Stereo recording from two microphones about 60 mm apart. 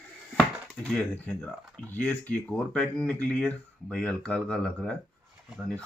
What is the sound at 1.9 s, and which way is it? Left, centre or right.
Speech, left.